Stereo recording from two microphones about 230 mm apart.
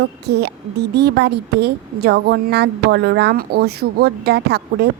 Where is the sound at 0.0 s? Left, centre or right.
Right.